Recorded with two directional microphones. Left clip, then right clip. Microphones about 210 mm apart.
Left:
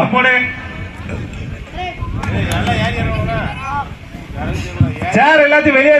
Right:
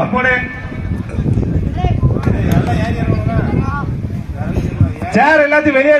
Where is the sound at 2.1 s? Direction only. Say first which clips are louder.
Left 1 dB; 30° left (ahead or behind).